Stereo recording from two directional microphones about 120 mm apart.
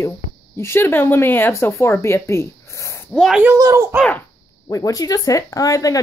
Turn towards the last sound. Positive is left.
turn(degrees=25)  # may be behind; listen again after turning